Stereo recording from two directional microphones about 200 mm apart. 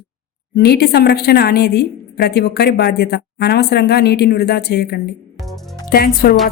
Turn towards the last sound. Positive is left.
turn(degrees=50)  # may be behind; listen again after turning